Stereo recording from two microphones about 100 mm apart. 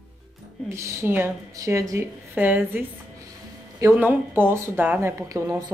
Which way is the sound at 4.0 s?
20° right (ahead or behind).